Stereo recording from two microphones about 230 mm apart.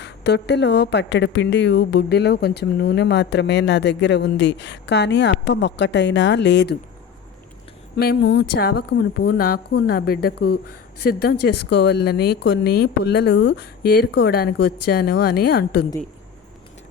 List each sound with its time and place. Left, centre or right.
0.0 s a woman's voice: left
7.9 s a woman's voice: left